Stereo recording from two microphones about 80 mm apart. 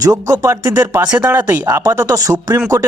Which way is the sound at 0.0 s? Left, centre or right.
Right.